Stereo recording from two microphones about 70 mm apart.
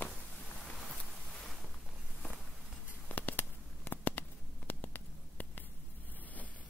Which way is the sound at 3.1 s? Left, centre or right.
Left.